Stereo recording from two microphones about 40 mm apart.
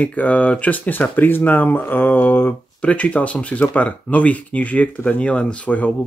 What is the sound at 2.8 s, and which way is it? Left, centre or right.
Speech, left.